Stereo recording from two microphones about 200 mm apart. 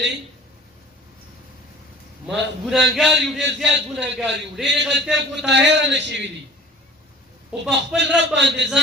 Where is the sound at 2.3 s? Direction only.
Centre (ahead or behind).